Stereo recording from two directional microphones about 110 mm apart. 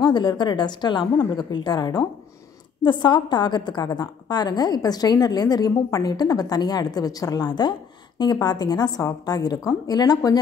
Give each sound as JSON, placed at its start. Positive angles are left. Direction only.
{"t": 0.0, "sound": "a woman's voice", "side_deg": 40}